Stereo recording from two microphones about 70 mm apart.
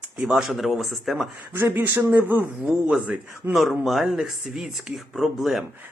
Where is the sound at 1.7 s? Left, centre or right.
Right.